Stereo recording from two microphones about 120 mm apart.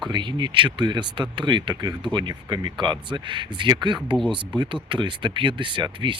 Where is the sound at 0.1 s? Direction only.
40° right (ahead or behind).